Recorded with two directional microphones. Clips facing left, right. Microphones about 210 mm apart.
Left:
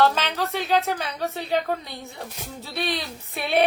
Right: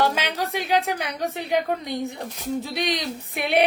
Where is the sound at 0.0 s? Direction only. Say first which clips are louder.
Left 2 dB; 10° right (ahead or behind).